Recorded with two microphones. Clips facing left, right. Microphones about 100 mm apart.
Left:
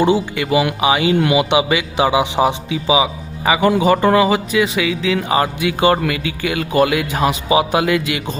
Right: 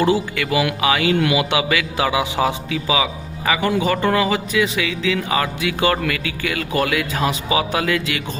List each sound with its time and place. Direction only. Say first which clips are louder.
0.0 s a man's voice: left 3 dB; 20° left (ahead or behind)
5.5 s a man's voice: left 4 dB; 25° left (ahead or behind)